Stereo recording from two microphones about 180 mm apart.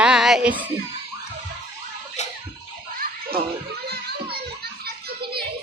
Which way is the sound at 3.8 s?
65° right (ahead or behind).